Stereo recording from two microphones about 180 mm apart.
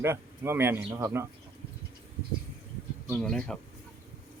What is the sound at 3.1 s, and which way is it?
Speech, 5° left (ahead or behind).